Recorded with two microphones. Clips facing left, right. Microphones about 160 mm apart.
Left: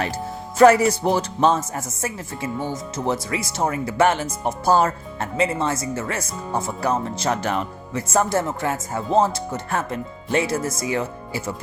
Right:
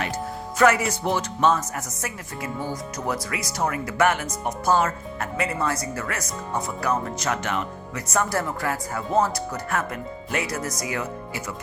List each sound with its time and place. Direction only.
0.6 s speech: 35° left (ahead or behind)